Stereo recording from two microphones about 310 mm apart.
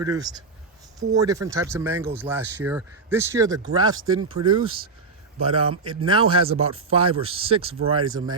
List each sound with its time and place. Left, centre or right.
0.0 s speech: centre
4.0 s speech: right
4.4 s speech: centre